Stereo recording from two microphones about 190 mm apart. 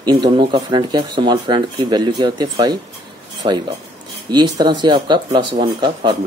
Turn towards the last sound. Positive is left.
turn(degrees=-25)  # may be behind; listen again after turning